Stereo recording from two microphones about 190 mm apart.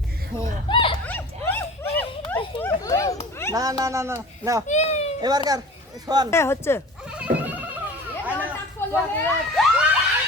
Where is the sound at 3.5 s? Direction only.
20° right (ahead or behind).